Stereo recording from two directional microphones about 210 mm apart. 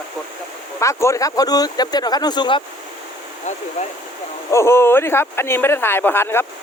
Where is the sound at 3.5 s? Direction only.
35° left (ahead or behind).